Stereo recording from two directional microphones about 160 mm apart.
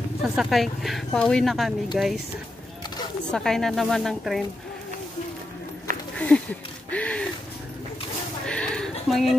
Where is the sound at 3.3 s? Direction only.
5° left (ahead or behind).